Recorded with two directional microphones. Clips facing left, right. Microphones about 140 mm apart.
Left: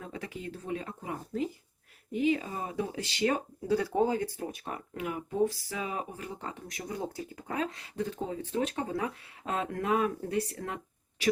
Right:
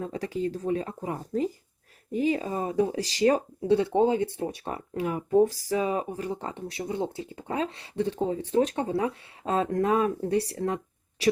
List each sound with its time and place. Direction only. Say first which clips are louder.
0.0 s speech: right 10 dB; 35° right (ahead or behind)